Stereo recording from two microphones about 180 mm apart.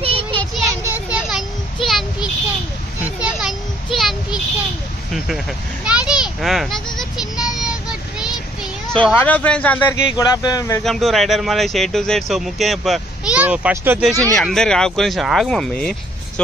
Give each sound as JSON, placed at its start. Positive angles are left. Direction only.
{"t": 0.0, "sound": "child singing", "side_deg": -30}
{"t": 0.4, "sound": "a sound", "side_deg": 0}
{"t": 1.9, "sound": "child singing", "side_deg": 0}
{"t": 3.0, "sound": "children playing", "side_deg": -5}
{"t": 5.9, "sound": "children playing", "side_deg": -5}
{"t": 8.9, "sound": "speech", "side_deg": 5}
{"t": 10.0, "sound": "speech", "side_deg": 20}
{"t": 10.8, "sound": "speech", "side_deg": 0}
{"t": 14.3, "sound": "speech", "side_deg": 5}